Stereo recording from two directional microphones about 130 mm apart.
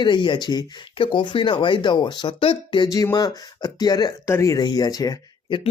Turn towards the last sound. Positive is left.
turn(degrees=30)  # may be behind; listen again after turning